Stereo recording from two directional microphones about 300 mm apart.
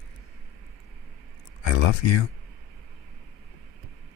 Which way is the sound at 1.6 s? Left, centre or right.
Left.